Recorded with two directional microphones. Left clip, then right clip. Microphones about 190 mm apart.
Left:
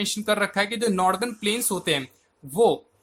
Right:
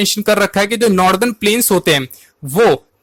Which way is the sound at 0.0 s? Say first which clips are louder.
Right 11 dB; 35° right (ahead or behind).